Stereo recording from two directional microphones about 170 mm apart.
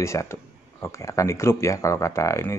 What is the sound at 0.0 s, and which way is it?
Speech, 15° left (ahead or behind).